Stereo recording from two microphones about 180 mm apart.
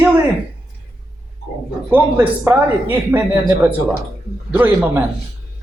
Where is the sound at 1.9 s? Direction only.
10° right (ahead or behind).